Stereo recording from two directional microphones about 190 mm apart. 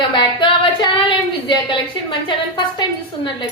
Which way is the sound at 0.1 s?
25° left (ahead or behind).